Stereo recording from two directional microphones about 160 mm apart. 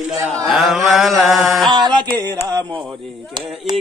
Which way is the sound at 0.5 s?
Centre (ahead or behind).